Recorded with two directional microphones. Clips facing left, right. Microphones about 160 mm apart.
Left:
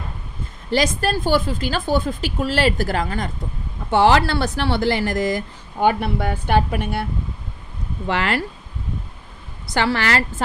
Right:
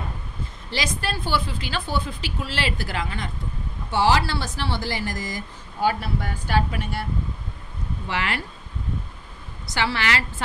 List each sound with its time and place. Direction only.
0.7 s a woman's voice: 45° left (ahead or behind)
3.9 s speech: 60° left (ahead or behind)
8.1 s a woman's voice: 50° left (ahead or behind)
9.7 s a woman's voice: 50° left (ahead or behind)